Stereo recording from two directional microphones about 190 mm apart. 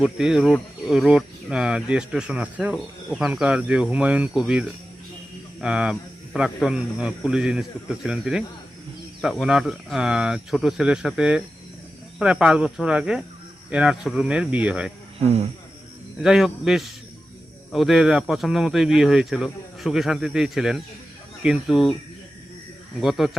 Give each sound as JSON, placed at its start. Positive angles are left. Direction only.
{"t": 0.0, "sound": "speech", "side_deg": -5}
{"t": 15.2, "sound": "speech", "side_deg": -35}
{"t": 16.2, "sound": "speech", "side_deg": 0}
{"t": 23.0, "sound": "speech", "side_deg": 0}